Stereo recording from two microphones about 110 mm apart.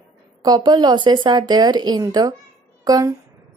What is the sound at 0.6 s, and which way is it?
A woman's voice, 45° right (ahead or behind).